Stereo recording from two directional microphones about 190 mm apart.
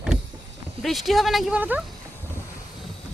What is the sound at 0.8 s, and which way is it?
Speech, centre (ahead or behind).